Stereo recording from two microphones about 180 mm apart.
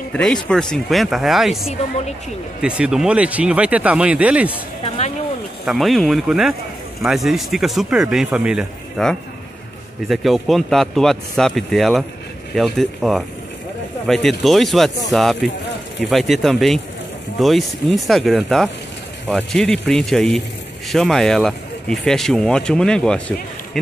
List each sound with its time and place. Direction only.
0.1 s speech: 5° left (ahead or behind)
4.8 s a sound: 35° left (ahead or behind)
5.7 s speech: centre (ahead or behind)